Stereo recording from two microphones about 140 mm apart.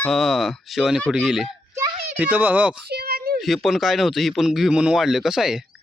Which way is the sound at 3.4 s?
Centre (ahead or behind).